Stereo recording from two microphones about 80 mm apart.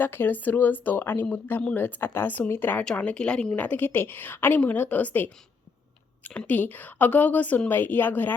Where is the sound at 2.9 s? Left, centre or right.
Centre.